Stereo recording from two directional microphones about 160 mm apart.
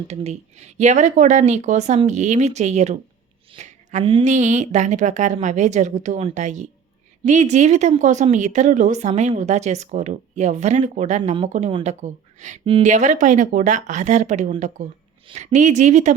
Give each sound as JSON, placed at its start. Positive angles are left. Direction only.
{"t": 0.1, "sound": "a woman's voice", "side_deg": -45}
{"t": 3.6, "sound": "a sound", "side_deg": -45}
{"t": 4.2, "sound": "a woman's voice", "side_deg": -50}
{"t": 11.2, "sound": "speech", "side_deg": -30}
{"t": 11.4, "sound": "a woman's voice", "side_deg": -50}